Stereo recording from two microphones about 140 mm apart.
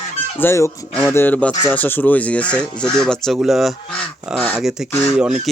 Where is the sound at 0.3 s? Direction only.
20° left (ahead or behind).